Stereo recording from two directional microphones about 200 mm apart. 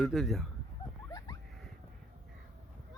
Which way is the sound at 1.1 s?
20° left (ahead or behind).